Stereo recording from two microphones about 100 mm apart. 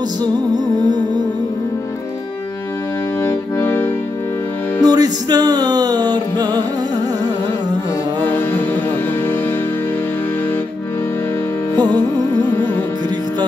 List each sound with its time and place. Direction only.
3.3 s music: 20° left (ahead or behind)
4.8 s music: 40° right (ahead or behind)
11.8 s music: 45° right (ahead or behind)